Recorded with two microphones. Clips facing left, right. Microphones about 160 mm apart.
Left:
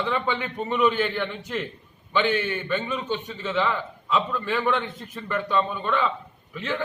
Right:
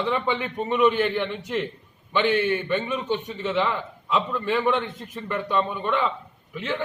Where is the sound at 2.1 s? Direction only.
15° right (ahead or behind).